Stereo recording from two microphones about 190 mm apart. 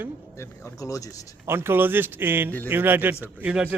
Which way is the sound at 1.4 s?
10° right (ahead or behind).